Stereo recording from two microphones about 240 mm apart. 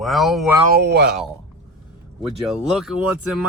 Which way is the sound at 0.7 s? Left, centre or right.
Right.